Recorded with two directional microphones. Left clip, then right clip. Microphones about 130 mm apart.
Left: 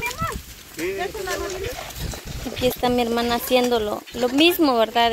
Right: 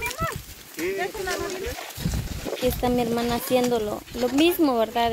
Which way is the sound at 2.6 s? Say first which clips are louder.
Left 3 dB; 5° right (ahead or behind).